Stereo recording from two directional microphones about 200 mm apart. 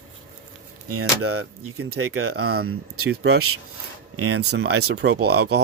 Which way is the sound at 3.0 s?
55° right (ahead or behind).